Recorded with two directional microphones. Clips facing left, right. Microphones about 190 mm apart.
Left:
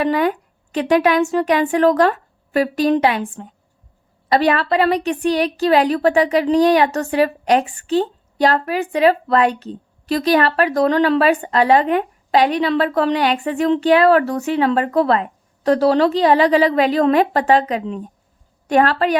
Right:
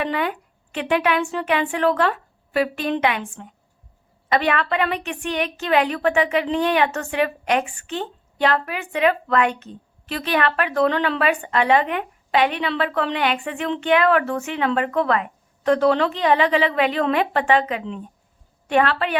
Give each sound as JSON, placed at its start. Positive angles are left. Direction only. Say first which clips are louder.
{"t": 0.0, "sound": "a woman's voice", "louder": "left 6 dB", "side_deg": 40}